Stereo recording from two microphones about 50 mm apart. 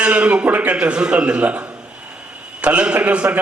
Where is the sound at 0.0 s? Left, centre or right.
Right.